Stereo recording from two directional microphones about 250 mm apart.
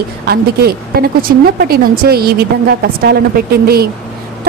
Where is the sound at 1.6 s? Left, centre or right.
Right.